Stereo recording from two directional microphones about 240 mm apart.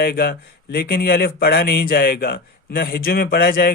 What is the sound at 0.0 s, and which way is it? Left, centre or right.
Speech, left.